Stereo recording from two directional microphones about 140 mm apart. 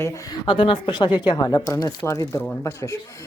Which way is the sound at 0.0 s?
25° left (ahead or behind).